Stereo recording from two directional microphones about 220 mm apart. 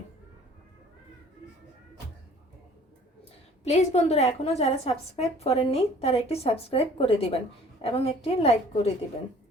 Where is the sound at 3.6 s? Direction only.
30° left (ahead or behind).